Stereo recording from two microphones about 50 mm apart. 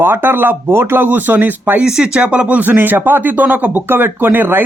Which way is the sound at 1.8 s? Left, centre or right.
Right.